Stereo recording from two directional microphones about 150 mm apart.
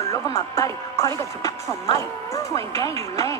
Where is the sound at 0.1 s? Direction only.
20° left (ahead or behind).